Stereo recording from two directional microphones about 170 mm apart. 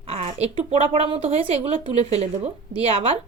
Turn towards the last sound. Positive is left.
turn(degrees=-35)  # may be behind; listen again after turning